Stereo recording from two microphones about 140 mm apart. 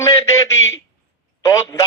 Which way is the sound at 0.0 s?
20° left (ahead or behind).